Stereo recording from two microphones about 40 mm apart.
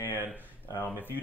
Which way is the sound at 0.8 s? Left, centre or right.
Left.